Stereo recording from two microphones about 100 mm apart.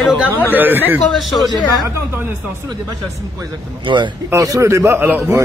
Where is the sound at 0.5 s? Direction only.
20° right (ahead or behind).